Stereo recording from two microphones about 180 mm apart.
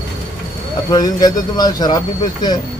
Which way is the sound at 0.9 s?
20° left (ahead or behind).